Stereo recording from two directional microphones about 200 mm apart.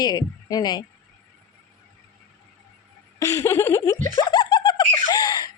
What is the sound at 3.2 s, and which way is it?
Speech, 15° left (ahead or behind).